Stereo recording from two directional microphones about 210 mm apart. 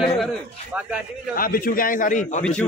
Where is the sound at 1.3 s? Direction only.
45° left (ahead or behind).